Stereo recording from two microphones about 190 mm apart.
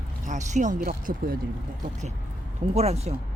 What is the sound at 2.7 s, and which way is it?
Speech, 35° right (ahead or behind).